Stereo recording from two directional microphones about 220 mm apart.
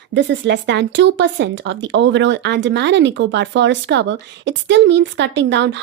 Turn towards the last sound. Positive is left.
turn(degrees=-55)  # may be behind; listen again after turning